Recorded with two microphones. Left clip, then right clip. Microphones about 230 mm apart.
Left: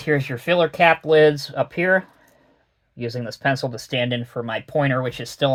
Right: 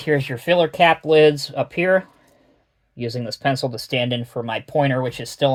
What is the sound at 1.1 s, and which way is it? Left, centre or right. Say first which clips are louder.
Speech: right 1 dB; centre.